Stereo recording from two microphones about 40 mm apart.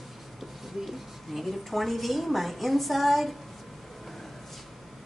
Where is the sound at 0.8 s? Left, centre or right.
Centre.